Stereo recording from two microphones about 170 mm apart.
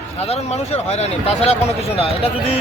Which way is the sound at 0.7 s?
40° left (ahead or behind).